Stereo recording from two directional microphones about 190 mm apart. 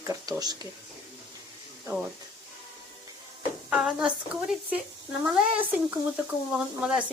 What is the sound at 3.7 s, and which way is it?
Speech, 5° right (ahead or behind).